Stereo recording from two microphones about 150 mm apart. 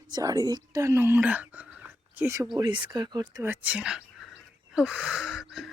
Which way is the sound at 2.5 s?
30° right (ahead or behind).